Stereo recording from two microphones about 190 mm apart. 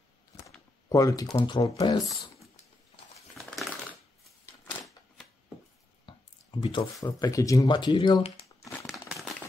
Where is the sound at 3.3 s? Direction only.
Centre (ahead or behind).